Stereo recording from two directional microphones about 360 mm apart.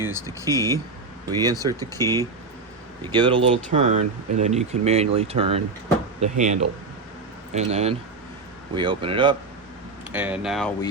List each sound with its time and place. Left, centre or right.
0.0 s a sound: centre
0.5 s speech: centre
1.4 s speech: centre
2.0 s speech: centre
3.0 s speech: centre